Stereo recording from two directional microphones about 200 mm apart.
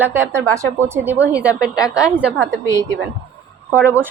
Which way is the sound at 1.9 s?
5° right (ahead or behind).